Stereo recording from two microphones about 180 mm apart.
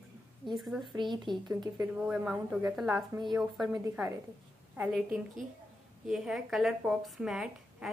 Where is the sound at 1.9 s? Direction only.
5° right (ahead or behind).